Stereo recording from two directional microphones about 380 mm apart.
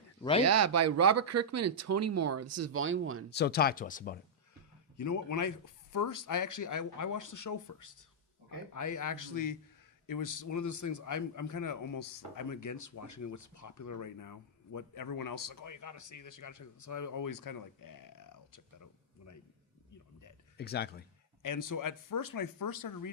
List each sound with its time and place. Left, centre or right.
0.2 s speech: centre
0.4 s speech: right
3.3 s speech: left
4.9 s a man's voice: left
20.6 s speech: left
21.4 s speech: left